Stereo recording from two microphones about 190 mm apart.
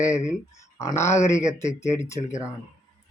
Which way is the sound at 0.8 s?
15° left (ahead or behind).